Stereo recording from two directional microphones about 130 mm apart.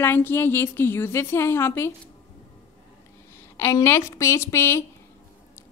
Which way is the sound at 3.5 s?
20° left (ahead or behind).